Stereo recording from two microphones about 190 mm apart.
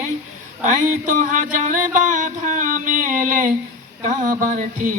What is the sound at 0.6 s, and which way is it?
Music, 40° right (ahead or behind).